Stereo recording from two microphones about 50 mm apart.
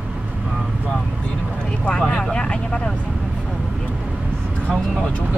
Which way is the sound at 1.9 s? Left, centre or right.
Centre.